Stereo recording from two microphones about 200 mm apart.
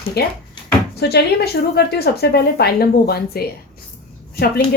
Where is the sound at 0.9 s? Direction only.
55° left (ahead or behind).